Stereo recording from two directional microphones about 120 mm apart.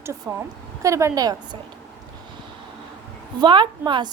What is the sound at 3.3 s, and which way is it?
Speech, 40° right (ahead or behind).